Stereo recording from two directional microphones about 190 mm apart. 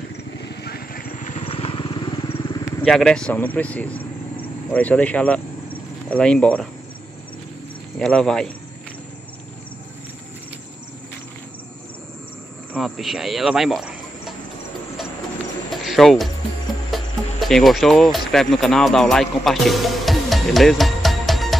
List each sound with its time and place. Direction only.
0.4 s vehicle: 60° left (ahead or behind); by 2.6 s 25° left (ahead or behind)
2.8 s speech: 5° left (ahead or behind)
8.0 s speech: 5° left (ahead or behind)
12.7 s speech: centre (ahead or behind)
15.7 s music: centre (ahead or behind)
16.9 s speech: centre (ahead or behind)